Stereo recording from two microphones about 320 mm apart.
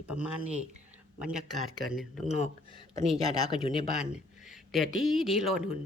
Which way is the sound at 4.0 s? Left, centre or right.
Centre.